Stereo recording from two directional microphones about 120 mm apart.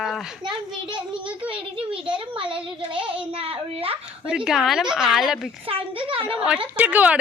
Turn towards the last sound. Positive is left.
turn(degrees=-10)  # may be behind; listen again after turning